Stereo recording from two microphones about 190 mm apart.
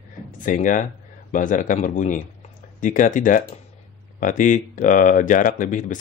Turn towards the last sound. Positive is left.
turn(degrees=45)  # may be behind; listen again after turning